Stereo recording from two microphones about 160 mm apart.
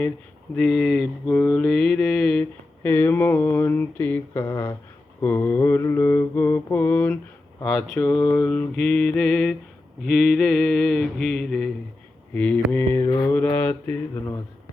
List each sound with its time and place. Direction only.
0.5 s mantra: 5° left (ahead or behind)